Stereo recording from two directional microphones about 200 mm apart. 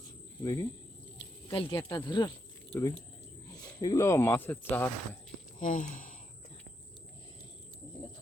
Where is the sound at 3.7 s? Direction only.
20° left (ahead or behind).